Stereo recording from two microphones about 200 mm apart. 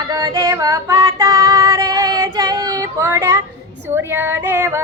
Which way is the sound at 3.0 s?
10° right (ahead or behind).